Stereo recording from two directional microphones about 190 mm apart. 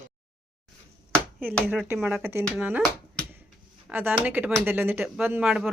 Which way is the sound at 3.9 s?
10° right (ahead or behind).